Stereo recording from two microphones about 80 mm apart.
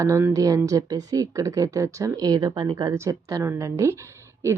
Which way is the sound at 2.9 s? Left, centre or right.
Right.